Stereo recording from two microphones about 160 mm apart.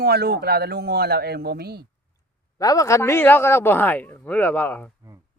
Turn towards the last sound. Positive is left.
turn(degrees=10)  # may be behind; listen again after turning